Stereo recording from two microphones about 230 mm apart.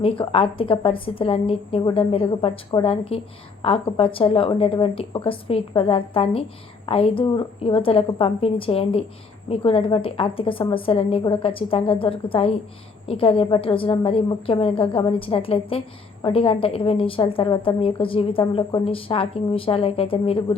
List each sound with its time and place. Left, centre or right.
0.0 s a woman's voice: left